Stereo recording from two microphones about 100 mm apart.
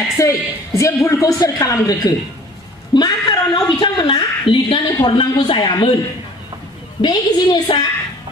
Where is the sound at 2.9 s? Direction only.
45° left (ahead or behind).